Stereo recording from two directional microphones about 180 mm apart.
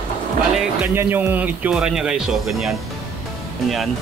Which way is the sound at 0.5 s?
10° right (ahead or behind).